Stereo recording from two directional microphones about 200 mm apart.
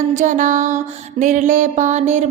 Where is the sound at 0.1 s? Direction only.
35° right (ahead or behind).